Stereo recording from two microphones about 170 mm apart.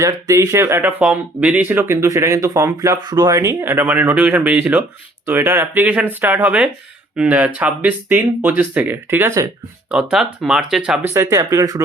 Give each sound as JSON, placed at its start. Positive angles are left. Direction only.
{"t": 0.0, "sound": "speech", "side_deg": -20}
{"t": 9.9, "sound": "speech", "side_deg": -5}
{"t": 11.0, "sound": "speech", "side_deg": -15}